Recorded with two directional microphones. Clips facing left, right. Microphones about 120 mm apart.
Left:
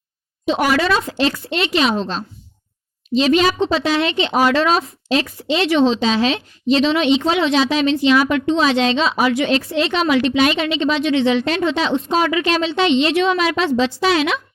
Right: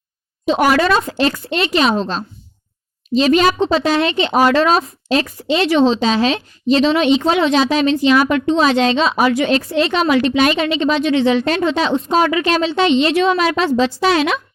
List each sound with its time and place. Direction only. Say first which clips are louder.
0.4 s a woman's voice: right 3 dB; 45° right (ahead or behind)